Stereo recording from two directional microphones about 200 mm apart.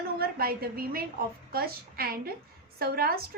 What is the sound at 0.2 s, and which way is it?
A woman's voice, 50° right (ahead or behind).